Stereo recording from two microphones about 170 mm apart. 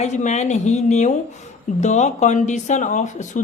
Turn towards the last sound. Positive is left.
turn(degrees=45)  # may be behind; listen again after turning